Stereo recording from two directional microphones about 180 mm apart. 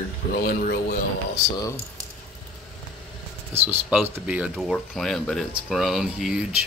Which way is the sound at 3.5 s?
10° right (ahead or behind).